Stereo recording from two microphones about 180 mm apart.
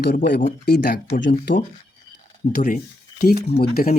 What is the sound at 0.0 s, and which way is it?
Speech, 60° left (ahead or behind).